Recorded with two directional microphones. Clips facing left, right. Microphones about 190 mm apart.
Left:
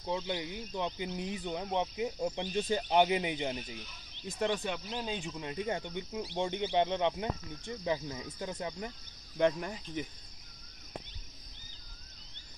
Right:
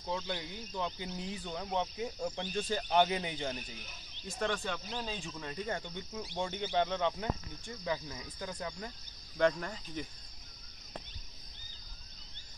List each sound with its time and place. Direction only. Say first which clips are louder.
0.0 s speech: left 3 dB; 15° left (ahead or behind)